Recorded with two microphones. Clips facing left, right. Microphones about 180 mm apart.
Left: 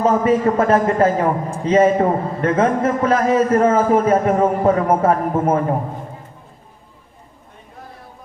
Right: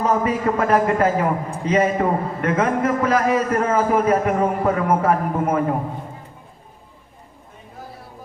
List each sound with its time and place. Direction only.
0.0 s a man's voice: 30° left (ahead or behind)